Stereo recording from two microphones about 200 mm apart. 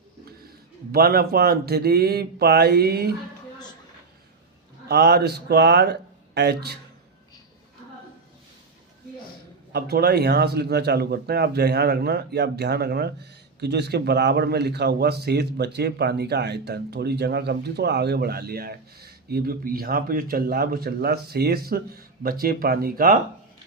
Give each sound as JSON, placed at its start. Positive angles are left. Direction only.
{"t": 0.9, "sound": "speech", "side_deg": -50}
{"t": 4.9, "sound": "speech", "side_deg": -55}
{"t": 9.7, "sound": "speech", "side_deg": -55}